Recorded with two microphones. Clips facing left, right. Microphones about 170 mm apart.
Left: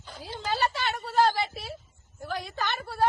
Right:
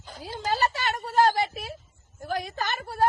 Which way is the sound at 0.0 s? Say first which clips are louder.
Right 3 dB; 40° right (ahead or behind).